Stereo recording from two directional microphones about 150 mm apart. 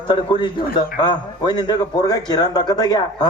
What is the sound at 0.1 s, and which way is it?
A man's voice, 30° left (ahead or behind).